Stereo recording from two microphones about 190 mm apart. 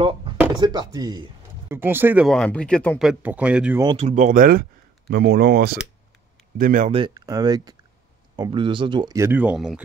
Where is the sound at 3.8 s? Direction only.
35° right (ahead or behind).